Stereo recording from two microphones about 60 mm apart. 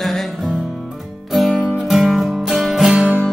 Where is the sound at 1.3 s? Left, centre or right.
Centre.